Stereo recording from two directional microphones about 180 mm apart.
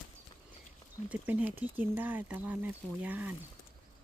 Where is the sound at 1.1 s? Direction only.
10° right (ahead or behind).